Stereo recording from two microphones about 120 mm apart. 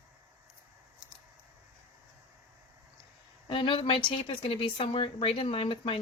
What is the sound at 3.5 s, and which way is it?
A woman's voice, 45° left (ahead or behind).